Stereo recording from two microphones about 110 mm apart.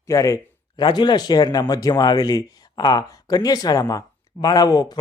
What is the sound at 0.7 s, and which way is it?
Speech, 45° left (ahead or behind).